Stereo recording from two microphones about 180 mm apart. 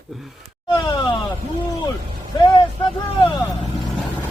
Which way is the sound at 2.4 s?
25° left (ahead or behind).